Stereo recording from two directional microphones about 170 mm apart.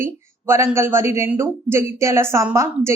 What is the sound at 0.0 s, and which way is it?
A man's voice, 15° right (ahead or behind).